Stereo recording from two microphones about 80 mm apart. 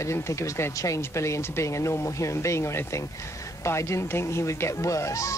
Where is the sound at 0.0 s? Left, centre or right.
Left.